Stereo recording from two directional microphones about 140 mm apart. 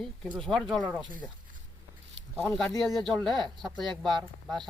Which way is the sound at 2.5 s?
5° left (ahead or behind).